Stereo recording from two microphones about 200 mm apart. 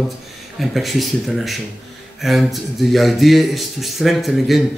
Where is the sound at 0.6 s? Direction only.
Centre (ahead or behind).